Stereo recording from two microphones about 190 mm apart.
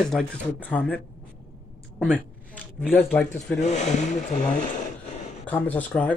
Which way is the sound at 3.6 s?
40° left (ahead or behind).